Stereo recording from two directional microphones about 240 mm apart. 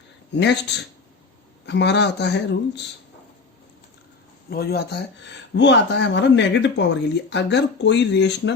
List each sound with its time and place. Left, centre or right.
0.3 s speech: left
4.4 s speech: left